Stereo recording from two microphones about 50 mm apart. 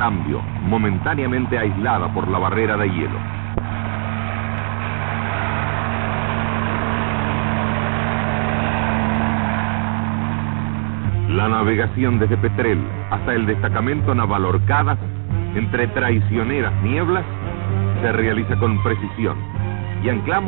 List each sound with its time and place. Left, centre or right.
0.7 s speech: left
5.1 s vehicle: left
11.3 s speech: left